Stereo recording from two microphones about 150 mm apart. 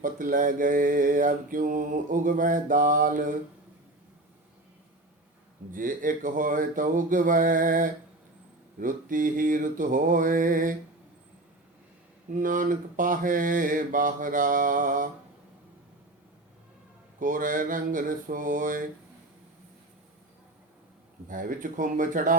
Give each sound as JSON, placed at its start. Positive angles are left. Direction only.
{"t": 0.0, "sound": "mantra", "side_deg": -65}
{"t": 5.7, "sound": "mantra", "side_deg": -65}
{"t": 12.3, "sound": "mantra", "side_deg": -65}
{"t": 17.2, "sound": "mantra", "side_deg": -65}
{"t": 21.2, "sound": "mantra", "side_deg": -60}